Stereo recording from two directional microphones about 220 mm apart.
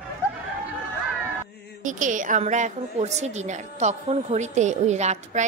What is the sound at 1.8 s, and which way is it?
A woman's voice, 35° right (ahead or behind).